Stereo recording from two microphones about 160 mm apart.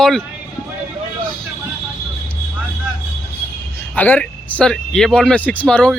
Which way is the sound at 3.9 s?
10° left (ahead or behind).